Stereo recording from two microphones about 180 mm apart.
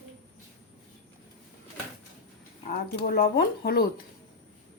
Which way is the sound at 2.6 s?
55° left (ahead or behind).